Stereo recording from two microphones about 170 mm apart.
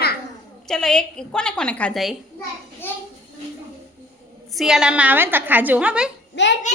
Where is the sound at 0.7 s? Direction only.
5° left (ahead or behind).